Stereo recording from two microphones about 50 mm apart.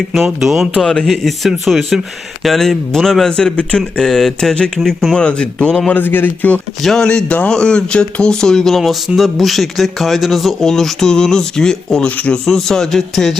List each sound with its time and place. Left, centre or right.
0.3 s speech: centre
0.8 s speech: centre
5.1 s speech: centre
5.9 s a man's voice: left
7.0 s speech: centre
8.8 s speech: centre
12.0 s speech: left
12.5 s speech: centre